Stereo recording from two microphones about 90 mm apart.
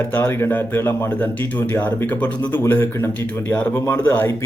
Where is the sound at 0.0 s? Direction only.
25° left (ahead or behind).